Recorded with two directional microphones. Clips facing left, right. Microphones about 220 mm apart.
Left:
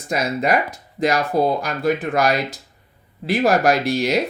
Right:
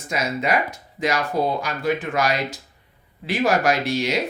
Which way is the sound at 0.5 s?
35° left (ahead or behind).